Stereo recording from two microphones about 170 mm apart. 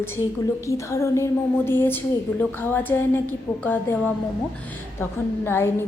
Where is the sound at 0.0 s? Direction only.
15° left (ahead or behind).